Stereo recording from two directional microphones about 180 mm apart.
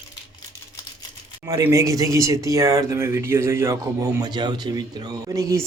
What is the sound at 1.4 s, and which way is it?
Speech, 15° right (ahead or behind).